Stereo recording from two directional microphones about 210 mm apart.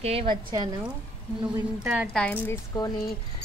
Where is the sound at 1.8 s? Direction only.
5° right (ahead or behind).